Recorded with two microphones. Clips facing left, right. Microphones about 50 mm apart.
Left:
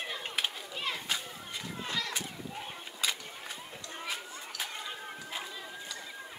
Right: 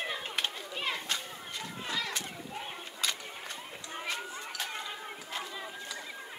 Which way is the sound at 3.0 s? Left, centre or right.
Centre.